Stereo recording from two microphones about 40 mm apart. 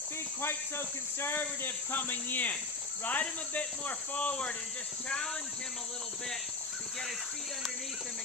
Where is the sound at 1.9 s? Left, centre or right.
Left.